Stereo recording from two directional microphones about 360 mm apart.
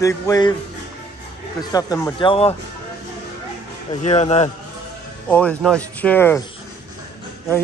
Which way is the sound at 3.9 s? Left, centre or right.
Centre.